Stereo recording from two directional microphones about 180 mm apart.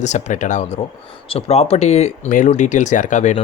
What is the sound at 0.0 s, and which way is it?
Speech, 40° left (ahead or behind).